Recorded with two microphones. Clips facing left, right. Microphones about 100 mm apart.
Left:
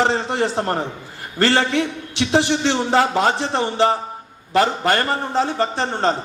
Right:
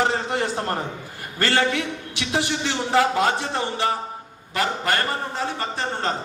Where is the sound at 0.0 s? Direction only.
30° left (ahead or behind).